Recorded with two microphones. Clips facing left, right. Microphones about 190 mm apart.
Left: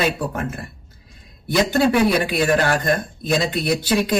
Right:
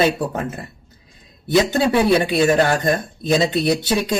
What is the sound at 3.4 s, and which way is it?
Speech, 20° right (ahead or behind).